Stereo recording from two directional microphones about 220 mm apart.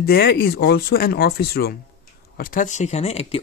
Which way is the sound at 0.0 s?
45° left (ahead or behind).